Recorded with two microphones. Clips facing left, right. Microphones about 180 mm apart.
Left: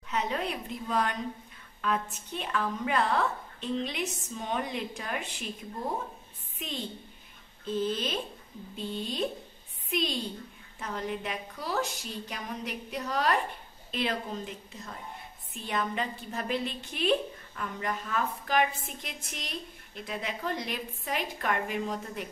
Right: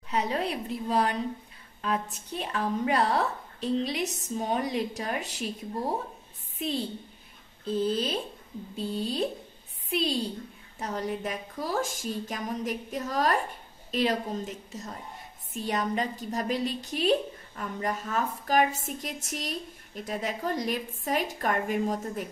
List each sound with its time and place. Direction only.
0.1 s a woman's voice: 35° right (ahead or behind)